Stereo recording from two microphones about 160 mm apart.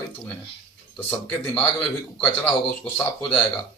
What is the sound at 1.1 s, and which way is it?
Speech, 10° left (ahead or behind).